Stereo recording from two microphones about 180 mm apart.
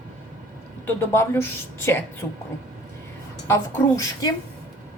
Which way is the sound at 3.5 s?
15° left (ahead or behind).